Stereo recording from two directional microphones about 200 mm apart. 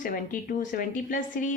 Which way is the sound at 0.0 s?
45° left (ahead or behind).